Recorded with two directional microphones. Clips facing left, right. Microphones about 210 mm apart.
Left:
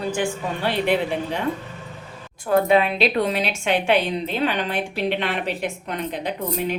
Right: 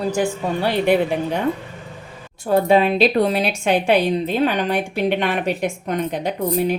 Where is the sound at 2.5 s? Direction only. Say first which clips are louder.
Right 2 dB; 30° right (ahead or behind).